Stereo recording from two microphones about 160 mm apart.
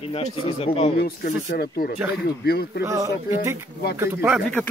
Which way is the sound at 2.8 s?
20° right (ahead or behind).